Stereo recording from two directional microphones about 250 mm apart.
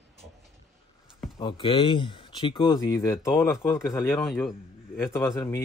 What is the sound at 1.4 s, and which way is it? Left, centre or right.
Speech, centre.